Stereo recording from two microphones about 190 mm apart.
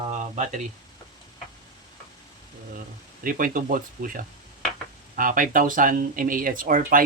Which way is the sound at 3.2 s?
45° right (ahead or behind).